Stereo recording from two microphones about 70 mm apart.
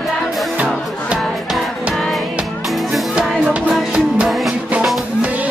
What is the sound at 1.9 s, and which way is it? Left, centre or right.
Music, centre.